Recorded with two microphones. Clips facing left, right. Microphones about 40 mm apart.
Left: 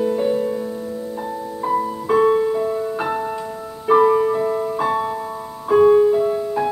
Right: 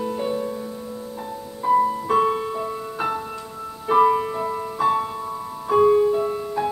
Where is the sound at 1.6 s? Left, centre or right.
Centre.